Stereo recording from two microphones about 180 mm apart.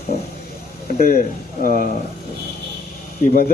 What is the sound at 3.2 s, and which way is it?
Speech, 50° left (ahead or behind).